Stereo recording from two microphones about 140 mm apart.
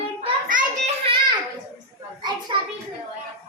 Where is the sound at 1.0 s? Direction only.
35° right (ahead or behind).